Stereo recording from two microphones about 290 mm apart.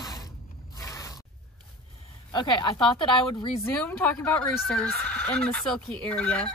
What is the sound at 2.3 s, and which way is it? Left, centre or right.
Speech, centre.